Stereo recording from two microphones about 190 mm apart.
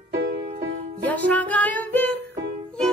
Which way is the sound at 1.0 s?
10° left (ahead or behind).